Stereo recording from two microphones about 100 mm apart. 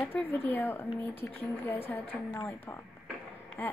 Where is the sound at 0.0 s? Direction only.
20° left (ahead or behind).